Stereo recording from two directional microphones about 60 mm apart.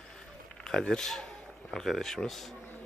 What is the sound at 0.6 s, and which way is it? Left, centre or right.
A man's voice, centre.